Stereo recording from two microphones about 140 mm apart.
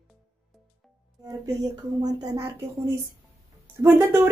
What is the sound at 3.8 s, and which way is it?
Speech, 15° right (ahead or behind).